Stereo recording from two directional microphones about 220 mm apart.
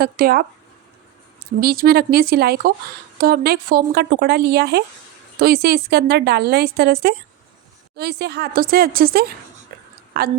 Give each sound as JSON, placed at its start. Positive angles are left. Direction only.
{"t": 0.0, "sound": "a woman's voice", "side_deg": -45}
{"t": 1.6, "sound": "a woman's voice", "side_deg": -45}